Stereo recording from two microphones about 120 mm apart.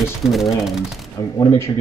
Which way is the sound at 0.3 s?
Centre (ahead or behind).